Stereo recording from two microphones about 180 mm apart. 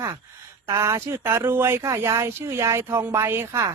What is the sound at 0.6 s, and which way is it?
Speech, 15° right (ahead or behind).